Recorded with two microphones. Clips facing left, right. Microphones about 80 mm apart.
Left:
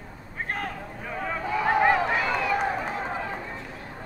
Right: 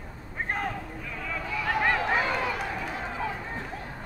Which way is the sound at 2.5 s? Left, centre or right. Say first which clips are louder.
Left 6 dB; left.